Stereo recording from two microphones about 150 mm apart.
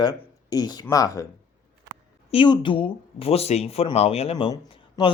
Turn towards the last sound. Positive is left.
turn(degrees=35)  # may be behind; listen again after turning